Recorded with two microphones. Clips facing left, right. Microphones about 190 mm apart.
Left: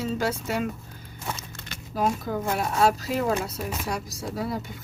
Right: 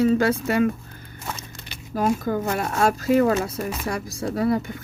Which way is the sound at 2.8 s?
50° right (ahead or behind).